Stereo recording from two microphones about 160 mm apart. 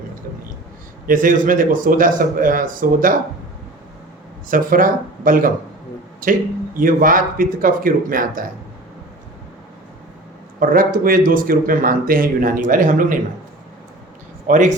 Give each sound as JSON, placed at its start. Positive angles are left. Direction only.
{"t": 1.0, "sound": "speech", "side_deg": -55}
{"t": 4.4, "sound": "speech", "side_deg": -60}
{"t": 10.6, "sound": "speech", "side_deg": -60}
{"t": 14.4, "sound": "speech", "side_deg": -50}